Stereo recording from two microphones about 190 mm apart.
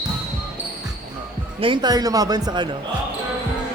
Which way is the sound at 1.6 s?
25° right (ahead or behind).